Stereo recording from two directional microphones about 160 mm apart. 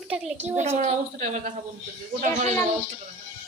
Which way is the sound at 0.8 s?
45° right (ahead or behind).